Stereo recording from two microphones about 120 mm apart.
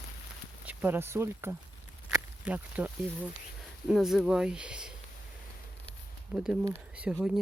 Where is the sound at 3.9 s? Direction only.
5° right (ahead or behind).